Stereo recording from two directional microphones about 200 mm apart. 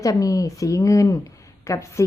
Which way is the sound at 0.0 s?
15° left (ahead or behind).